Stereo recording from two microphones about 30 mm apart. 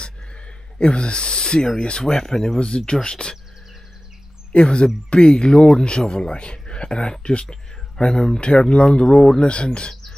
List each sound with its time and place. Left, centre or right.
0.7 s speech: left; by 2.6 s centre
2.9 s speech: left
4.6 s speech: left
9.4 s speech: left